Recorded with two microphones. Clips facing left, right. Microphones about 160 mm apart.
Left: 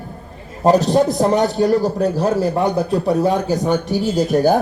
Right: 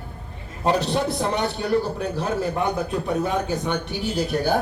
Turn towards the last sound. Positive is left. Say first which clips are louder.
# left 8 dB
turn(degrees=45)  # may be behind; listen again after turning